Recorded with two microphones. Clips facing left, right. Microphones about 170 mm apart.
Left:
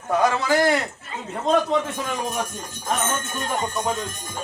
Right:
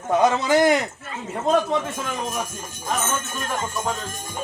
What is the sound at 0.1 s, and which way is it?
Speech, 20° right (ahead or behind).